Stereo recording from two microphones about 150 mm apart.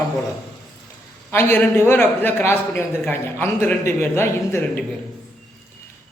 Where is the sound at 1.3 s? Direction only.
15° left (ahead or behind).